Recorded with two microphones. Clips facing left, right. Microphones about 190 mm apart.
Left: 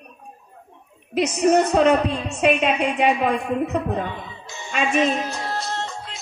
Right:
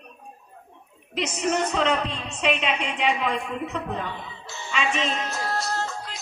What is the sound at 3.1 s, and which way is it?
A man's voice, 50° left (ahead or behind).